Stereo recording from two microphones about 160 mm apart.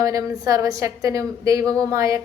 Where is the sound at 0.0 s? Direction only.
20° right (ahead or behind).